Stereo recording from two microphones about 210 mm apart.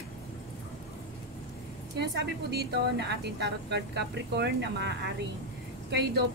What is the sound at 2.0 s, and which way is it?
A woman's voice, 50° right (ahead or behind).